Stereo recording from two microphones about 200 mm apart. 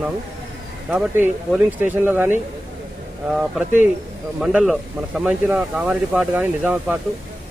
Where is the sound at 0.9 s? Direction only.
10° right (ahead or behind).